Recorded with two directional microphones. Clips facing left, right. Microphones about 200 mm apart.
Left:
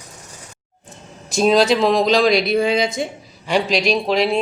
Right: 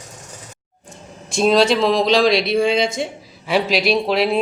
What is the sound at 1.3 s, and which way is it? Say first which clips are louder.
Speech: even; centre (ahead or behind).